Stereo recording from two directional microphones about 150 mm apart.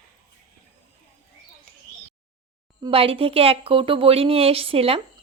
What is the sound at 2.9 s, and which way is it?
A woman's voice, 40° right (ahead or behind).